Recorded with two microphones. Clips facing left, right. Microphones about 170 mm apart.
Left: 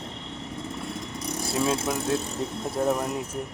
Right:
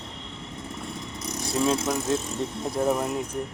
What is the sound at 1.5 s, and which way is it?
Speech, 5° left (ahead or behind).